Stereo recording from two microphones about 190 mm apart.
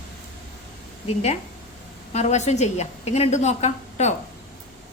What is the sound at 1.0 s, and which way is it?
A woman's voice, 35° left (ahead or behind).